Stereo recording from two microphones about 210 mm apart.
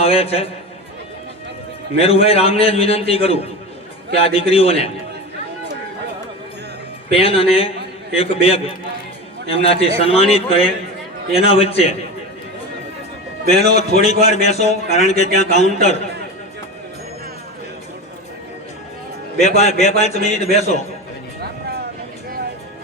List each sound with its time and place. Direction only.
0.0 s a man's voice: 30° left (ahead or behind)
2.0 s a man's voice: 30° left (ahead or behind)
7.1 s a man's voice: 25° left (ahead or behind)
13.7 s a man's voice: 30° left (ahead or behind)
19.4 s a man's voice: 30° left (ahead or behind)